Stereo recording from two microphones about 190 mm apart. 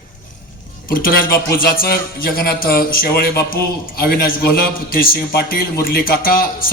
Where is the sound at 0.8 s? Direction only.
50° left (ahead or behind).